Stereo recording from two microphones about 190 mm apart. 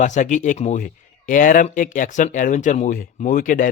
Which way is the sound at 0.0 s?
40° left (ahead or behind).